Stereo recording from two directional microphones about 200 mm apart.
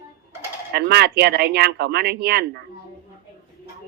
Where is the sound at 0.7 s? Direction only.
55° right (ahead or behind).